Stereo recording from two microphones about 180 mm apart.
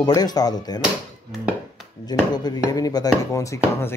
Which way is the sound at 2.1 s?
20° left (ahead or behind).